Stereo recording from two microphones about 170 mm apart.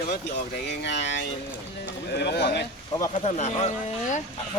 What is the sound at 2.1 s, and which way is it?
Speech, 75° left (ahead or behind).